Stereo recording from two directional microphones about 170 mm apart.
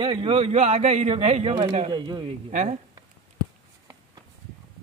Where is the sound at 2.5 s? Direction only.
45° right (ahead or behind).